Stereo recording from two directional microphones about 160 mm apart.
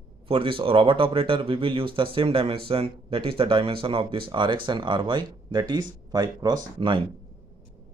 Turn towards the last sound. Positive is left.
turn(degrees=-30)  # may be behind; listen again after turning